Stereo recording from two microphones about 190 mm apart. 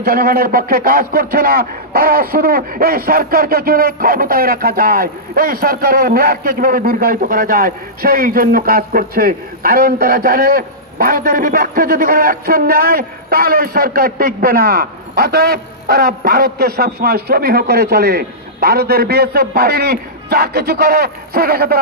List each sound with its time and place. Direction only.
0.0 s a man's voice: 50° right (ahead or behind)